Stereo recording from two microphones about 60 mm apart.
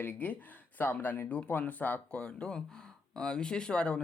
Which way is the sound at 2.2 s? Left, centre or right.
Centre.